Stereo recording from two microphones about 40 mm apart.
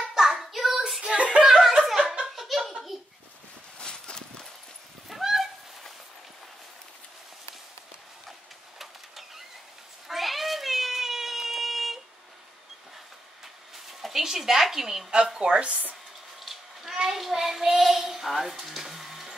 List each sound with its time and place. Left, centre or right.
0.1 s child singing: centre
1.1 s chuckle: right
1.6 s snicker: centre
2.3 s laughter: centre
2.9 s a sound: centre
3.8 s clip-clop: centre
5.1 s goose: centre
8.3 s a sound: centre
13.7 s a sound: centre
15.2 s a woman's voice: right
16.3 s child singing: centre